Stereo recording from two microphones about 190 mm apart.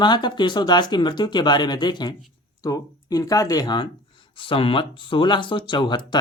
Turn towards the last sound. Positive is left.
turn(degrees=25)  # may be behind; listen again after turning